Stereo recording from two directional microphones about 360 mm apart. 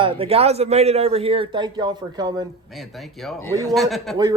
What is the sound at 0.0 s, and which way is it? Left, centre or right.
A man's voice, centre.